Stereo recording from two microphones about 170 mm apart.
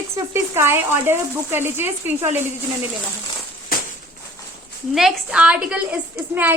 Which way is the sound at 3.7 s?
60° left (ahead or behind).